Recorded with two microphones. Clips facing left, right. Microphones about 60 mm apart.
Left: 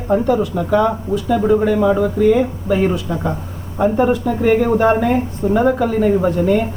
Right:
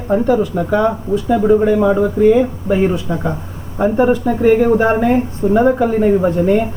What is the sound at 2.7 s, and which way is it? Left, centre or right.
Speech, centre.